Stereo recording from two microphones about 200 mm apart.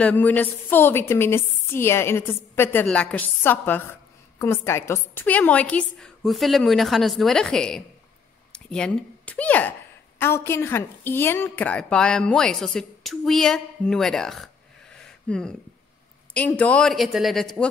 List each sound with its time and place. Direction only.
0.0 s a woman's voice: 10° left (ahead or behind)